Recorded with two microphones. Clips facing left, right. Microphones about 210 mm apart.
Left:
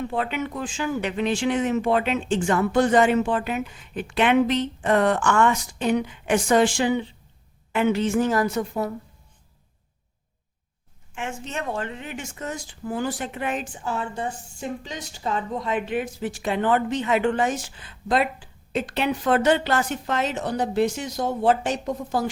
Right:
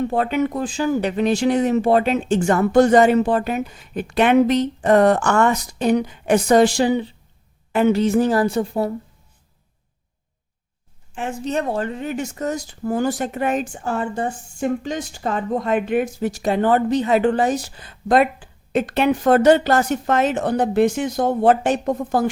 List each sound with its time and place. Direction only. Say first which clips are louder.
0.0 s speech: right 7 dB; 40° right (ahead or behind)
11.1 s speech: right 8 dB; 35° right (ahead or behind); by 22.3 s 55° right (ahead or behind)